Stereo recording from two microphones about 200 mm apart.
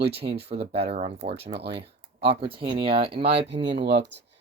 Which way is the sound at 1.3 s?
55° right (ahead or behind).